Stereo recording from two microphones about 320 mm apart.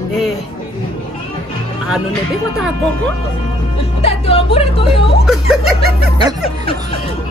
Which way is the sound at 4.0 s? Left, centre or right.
Centre.